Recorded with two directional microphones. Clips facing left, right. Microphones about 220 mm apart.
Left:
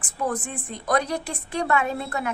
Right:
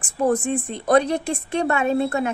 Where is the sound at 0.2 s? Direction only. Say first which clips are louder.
Right 8 dB; 25° right (ahead or behind).